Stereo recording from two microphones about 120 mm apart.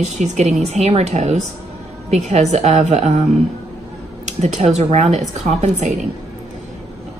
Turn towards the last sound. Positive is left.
turn(degrees=-70)  # may be behind; listen again after turning